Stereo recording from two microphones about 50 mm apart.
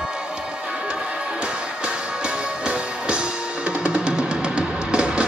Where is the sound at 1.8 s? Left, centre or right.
Right.